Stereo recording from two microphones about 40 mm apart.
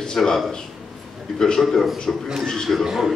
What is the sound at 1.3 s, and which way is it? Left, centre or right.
Speech, centre.